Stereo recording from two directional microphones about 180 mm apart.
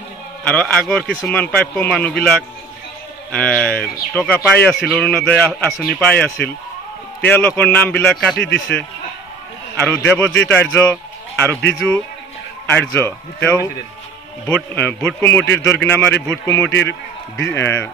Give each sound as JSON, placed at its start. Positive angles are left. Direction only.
{"t": 0.4, "sound": "a man's voice", "side_deg": 10}
{"t": 8.4, "sound": "a man's voice", "side_deg": 65}
{"t": 9.8, "sound": "a man's voice", "side_deg": 10}